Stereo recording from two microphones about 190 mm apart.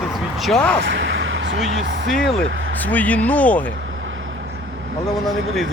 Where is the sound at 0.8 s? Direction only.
75° right (ahead or behind).